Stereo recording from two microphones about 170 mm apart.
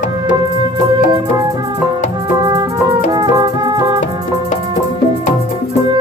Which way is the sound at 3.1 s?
20° right (ahead or behind).